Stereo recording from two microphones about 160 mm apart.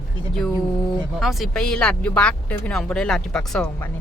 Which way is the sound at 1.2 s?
Centre (ahead or behind).